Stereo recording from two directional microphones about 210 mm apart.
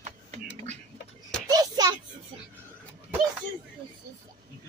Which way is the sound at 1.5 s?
20° right (ahead or behind).